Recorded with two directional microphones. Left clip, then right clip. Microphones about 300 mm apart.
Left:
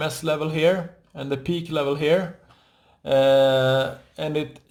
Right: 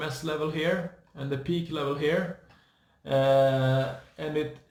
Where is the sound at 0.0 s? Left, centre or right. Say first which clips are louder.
Left 6 dB; left.